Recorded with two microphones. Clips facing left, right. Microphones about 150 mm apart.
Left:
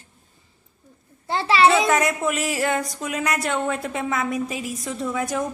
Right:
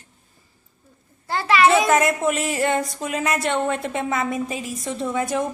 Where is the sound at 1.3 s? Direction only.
30° left (ahead or behind).